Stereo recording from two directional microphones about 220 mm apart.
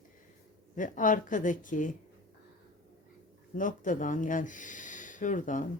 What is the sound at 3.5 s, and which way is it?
Speech, 35° left (ahead or behind).